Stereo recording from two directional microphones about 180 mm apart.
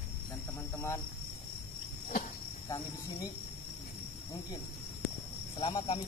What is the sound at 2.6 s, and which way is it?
Speech, 20° left (ahead or behind).